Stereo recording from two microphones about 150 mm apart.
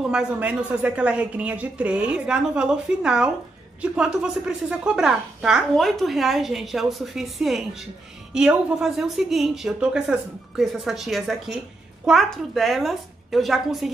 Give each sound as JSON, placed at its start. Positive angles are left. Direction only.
{"t": 0.0, "sound": "a woman's voice", "side_deg": -5}